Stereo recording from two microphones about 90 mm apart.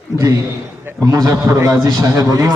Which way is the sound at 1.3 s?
30° right (ahead or behind).